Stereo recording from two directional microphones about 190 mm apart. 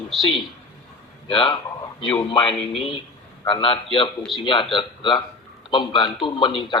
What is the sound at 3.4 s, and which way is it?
A man's voice, 25° left (ahead or behind).